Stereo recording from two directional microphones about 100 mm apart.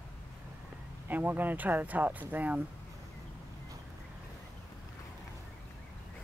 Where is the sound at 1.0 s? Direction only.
20° right (ahead or behind).